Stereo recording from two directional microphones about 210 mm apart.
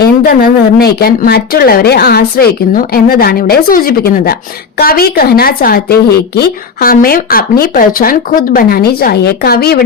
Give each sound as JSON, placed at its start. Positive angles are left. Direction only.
{"t": 0.0, "sound": "speech", "side_deg": 45}